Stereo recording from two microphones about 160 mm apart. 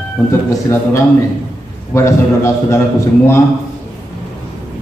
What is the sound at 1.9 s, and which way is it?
Speech, 20° left (ahead or behind).